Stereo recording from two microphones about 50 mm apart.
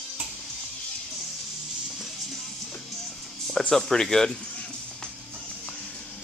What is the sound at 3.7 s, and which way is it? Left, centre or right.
Speech, centre.